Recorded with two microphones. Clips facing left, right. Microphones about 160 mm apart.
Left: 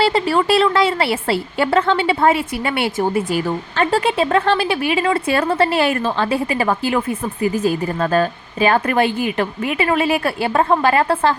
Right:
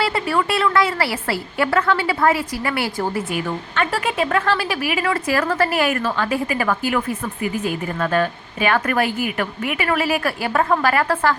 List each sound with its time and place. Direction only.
0.0 s a woman's voice: 25° left (ahead or behind)
7.5 s a woman's voice: 40° left (ahead or behind)